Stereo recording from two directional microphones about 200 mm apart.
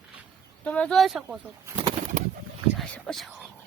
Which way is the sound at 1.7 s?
30° right (ahead or behind).